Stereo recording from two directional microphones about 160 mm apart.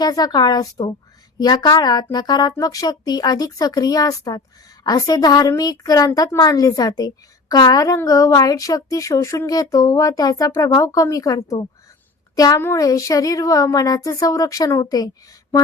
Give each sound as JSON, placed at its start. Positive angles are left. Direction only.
{"t": 0.0, "sound": "a woman's voice", "side_deg": 25}
{"t": 12.4, "sound": "a woman's voice", "side_deg": 20}